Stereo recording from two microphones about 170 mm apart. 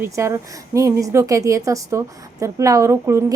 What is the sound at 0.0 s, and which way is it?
A woman's voice, 15° right (ahead or behind).